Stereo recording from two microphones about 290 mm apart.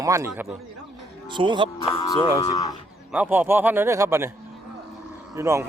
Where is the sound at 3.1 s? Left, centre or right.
Centre.